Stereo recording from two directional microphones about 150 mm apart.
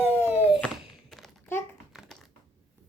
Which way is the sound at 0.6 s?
Centre (ahead or behind).